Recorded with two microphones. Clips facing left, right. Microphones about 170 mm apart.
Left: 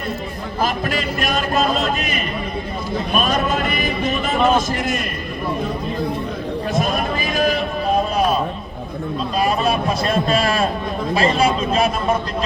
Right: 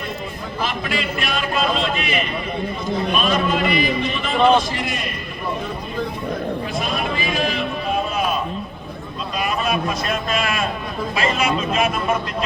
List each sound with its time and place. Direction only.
0.6 s a man's voice: 45° left (ahead or behind)
6.7 s a sound: 45° left (ahead or behind)
9.4 s a man's voice: 35° left (ahead or behind)